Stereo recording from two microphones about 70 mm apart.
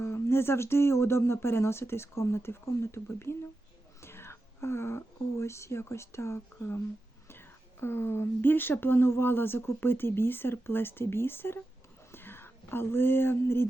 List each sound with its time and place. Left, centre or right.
0.0 s speech: left